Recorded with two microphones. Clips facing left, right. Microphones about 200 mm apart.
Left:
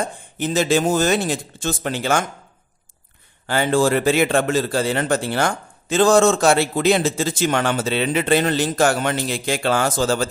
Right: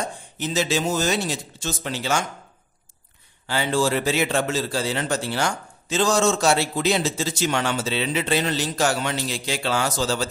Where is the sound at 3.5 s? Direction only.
55° left (ahead or behind).